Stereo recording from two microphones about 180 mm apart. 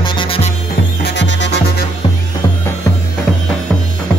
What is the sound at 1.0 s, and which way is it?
Music, 80° left.